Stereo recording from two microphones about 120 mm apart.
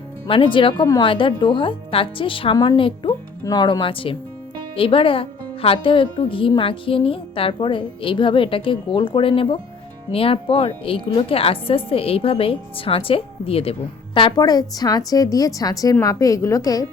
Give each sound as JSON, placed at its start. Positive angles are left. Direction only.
{"t": 0.3, "sound": "a woman's voice", "side_deg": 45}
{"t": 3.1, "sound": "a woman's voice", "side_deg": 30}